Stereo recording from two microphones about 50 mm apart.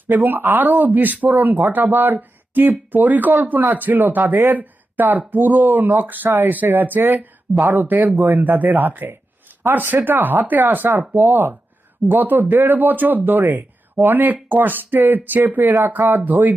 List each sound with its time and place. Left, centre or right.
0.1 s speech: right